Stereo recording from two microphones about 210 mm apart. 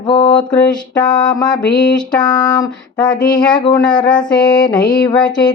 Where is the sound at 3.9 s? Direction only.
5° left (ahead or behind).